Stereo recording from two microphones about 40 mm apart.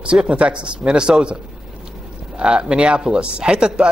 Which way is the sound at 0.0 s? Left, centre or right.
Right.